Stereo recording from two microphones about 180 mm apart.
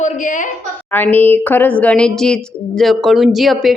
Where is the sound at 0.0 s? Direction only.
45° left (ahead or behind).